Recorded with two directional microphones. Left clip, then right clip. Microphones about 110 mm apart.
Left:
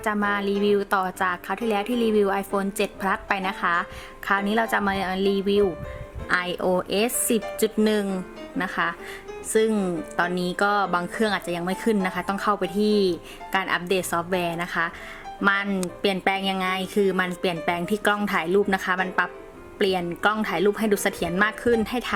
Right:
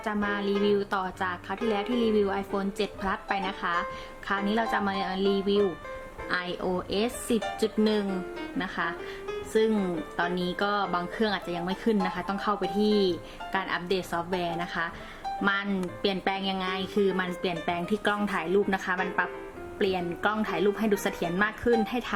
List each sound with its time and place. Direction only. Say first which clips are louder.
0.0 s speech: left 5 dB; 40° left (ahead or behind)